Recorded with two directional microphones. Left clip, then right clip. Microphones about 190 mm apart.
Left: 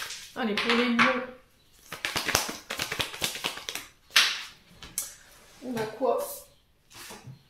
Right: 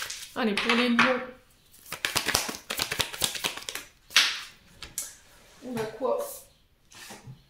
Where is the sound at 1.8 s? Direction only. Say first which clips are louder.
Right 2 dB; 30° right (ahead or behind).